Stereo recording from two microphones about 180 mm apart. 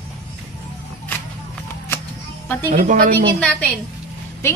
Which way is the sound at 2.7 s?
50° right (ahead or behind).